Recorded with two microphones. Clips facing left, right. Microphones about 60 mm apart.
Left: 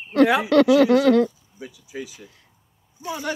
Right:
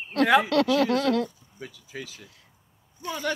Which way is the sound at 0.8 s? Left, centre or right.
Left.